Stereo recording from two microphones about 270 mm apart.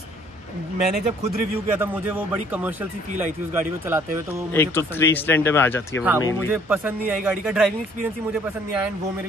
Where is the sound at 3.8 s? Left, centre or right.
Centre.